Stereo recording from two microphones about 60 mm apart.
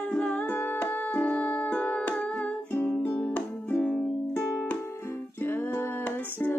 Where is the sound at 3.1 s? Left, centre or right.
Centre.